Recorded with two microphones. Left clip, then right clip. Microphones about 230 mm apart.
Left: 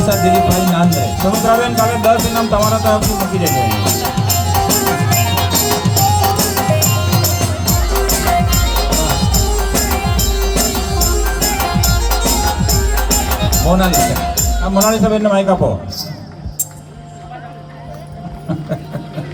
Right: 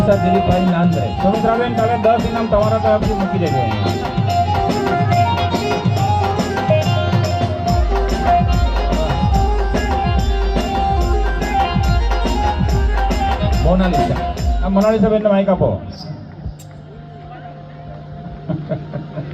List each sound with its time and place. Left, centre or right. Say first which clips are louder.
0.0 s music: left 2 dB; left
14.8 s a man's voice: left 1 dB; left